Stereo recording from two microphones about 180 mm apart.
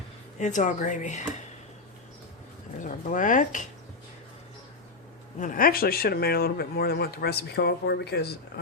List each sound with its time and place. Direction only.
0.3 s speech: 45° left (ahead or behind)
2.7 s speech: 45° left (ahead or behind)
5.4 s speech: 50° left (ahead or behind); by 8.3 s 65° left (ahead or behind)